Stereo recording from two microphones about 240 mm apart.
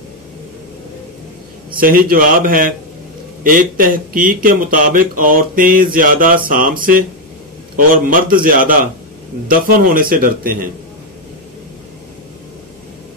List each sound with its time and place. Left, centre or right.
1.8 s speech: right